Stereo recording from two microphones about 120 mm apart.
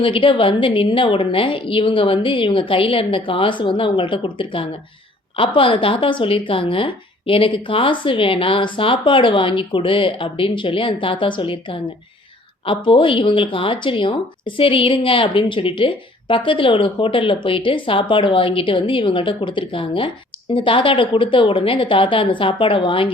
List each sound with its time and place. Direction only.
0.0 s speech: 45° left (ahead or behind)